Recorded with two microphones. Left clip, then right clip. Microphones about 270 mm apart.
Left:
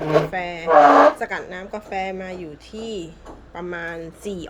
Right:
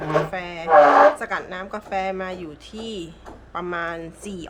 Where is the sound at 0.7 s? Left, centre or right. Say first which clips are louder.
Left 1 dB; left.